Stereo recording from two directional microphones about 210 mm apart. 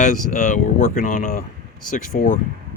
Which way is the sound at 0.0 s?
35° left (ahead or behind).